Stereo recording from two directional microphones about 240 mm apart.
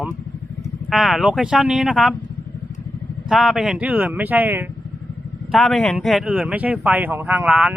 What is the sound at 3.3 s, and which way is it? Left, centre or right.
Speech, centre.